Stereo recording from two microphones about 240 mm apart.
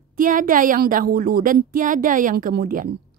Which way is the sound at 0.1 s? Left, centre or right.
Right.